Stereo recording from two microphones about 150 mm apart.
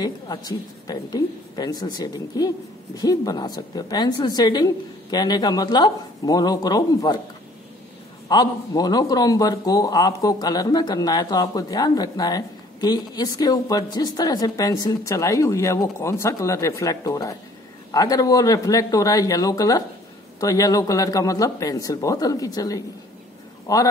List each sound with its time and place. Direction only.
0.0 s a man's voice: 25° left (ahead or behind)
8.3 s a man's voice: 25° left (ahead or behind)